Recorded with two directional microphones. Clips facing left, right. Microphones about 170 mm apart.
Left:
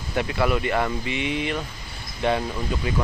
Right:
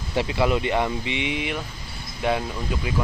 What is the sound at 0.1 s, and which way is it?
Speech, 25° right (ahead or behind).